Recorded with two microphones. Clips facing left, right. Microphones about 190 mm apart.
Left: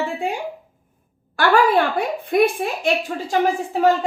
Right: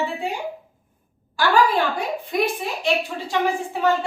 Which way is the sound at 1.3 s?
60° left (ahead or behind).